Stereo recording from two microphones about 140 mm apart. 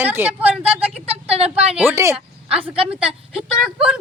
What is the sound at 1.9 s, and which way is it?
Speech, 20° right (ahead or behind).